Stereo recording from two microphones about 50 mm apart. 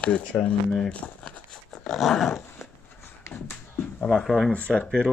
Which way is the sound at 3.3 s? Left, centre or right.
Left.